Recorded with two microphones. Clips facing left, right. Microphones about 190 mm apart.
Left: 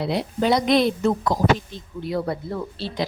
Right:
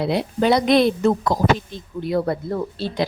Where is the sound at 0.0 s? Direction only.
60° right (ahead or behind); by 3.1 s 45° right (ahead or behind).